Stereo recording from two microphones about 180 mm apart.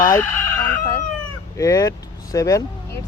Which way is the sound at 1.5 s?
20° left (ahead or behind).